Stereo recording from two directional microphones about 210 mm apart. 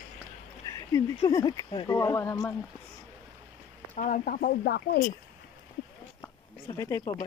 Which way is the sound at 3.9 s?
40° left (ahead or behind).